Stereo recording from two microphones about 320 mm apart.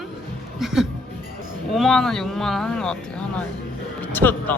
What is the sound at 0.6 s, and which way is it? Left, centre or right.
Speech, centre.